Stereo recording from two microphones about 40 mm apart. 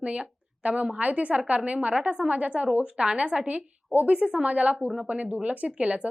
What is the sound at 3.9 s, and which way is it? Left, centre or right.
Speech, right.